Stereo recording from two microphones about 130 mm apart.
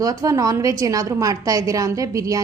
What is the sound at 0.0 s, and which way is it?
A woman's voice, 25° right (ahead or behind).